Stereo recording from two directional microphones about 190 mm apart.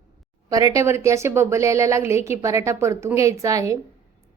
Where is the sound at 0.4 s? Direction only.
20° right (ahead or behind).